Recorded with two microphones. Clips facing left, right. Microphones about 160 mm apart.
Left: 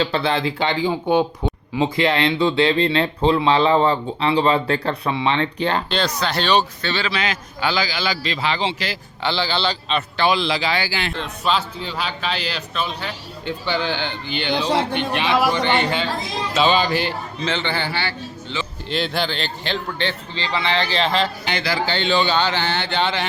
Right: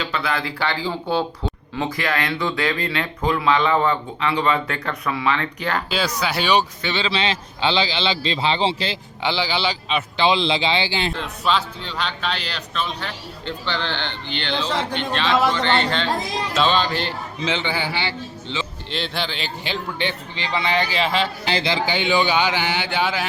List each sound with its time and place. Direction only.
0.0 s speech: 30° left (ahead or behind)
5.9 s speech: 5° right (ahead or behind); by 9.0 s 30° right (ahead or behind)
9.2 s speech: 15° right (ahead or behind)
10.2 s speech: 25° right (ahead or behind)
11.1 s a man's voice: centre (ahead or behind)
17.4 s speech: 15° right (ahead or behind)
18.9 s speech: centre (ahead or behind); by 20.8 s 20° right (ahead or behind)
20.9 s speech: 5° right (ahead or behind)
21.4 s speech: 30° right (ahead or behind); by 23.2 s 10° right (ahead or behind)